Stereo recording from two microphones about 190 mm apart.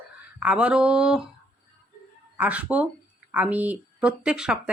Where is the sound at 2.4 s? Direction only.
10° right (ahead or behind).